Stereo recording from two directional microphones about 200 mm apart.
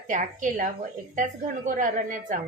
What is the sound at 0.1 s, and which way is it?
A woman's voice, 40° right (ahead or behind).